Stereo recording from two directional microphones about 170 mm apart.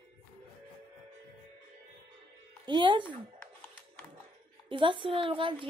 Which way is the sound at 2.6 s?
25° right (ahead or behind).